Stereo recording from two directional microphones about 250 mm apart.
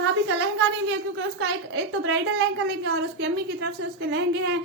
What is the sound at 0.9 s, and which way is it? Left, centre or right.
Speech, right.